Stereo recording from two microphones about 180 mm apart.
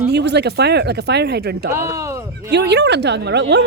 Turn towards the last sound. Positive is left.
turn(degrees=-70)  # may be behind; listen again after turning